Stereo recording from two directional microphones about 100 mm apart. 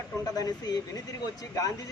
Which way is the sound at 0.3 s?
40° left (ahead or behind).